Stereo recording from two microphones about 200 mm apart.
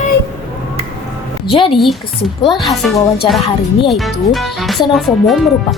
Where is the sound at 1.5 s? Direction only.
25° left (ahead or behind).